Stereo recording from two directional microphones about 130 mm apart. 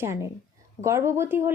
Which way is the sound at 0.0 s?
20° right (ahead or behind).